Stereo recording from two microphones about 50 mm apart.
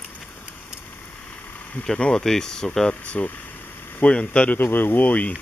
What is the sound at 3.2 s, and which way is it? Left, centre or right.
Speech, left.